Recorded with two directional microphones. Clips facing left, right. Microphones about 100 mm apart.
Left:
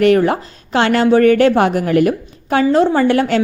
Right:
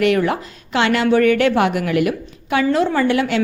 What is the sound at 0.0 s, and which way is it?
A woman's voice, 35° left (ahead or behind).